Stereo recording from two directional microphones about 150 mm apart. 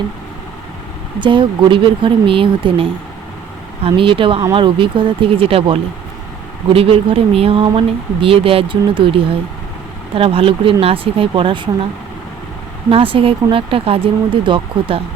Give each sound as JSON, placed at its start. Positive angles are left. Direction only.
{"t": 1.2, "sound": "speech", "side_deg": -35}
{"t": 12.9, "sound": "speech", "side_deg": -35}